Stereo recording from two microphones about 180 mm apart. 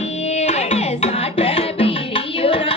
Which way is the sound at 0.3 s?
35° left (ahead or behind).